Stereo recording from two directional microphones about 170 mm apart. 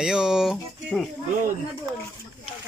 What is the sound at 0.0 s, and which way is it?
Speech, 5° right (ahead or behind).